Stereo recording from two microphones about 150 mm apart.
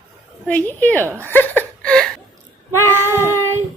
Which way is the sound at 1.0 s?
15° right (ahead or behind).